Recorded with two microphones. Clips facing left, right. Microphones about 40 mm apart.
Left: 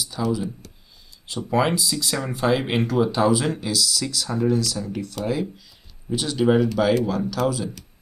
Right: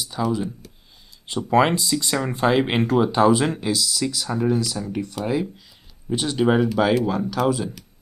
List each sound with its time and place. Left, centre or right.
0.0 s speech: centre
1.3 s speech: right
1.7 s speech: centre